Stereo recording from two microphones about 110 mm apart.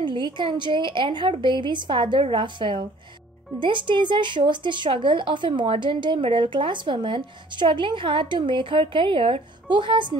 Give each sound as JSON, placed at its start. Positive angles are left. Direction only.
{"t": 0.0, "sound": "a woman's voice", "side_deg": -45}